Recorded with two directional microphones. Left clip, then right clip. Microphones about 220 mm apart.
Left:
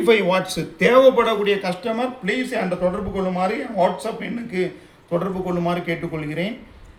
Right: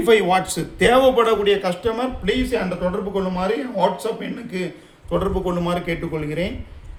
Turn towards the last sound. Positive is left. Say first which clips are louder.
# right 2 dB
turn(degrees=-25)  # may be behind; listen again after turning